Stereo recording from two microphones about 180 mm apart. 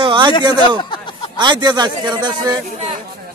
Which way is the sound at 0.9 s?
25° left (ahead or behind).